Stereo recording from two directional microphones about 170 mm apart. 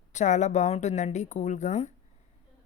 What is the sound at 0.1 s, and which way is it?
A woman's voice, 45° left (ahead or behind).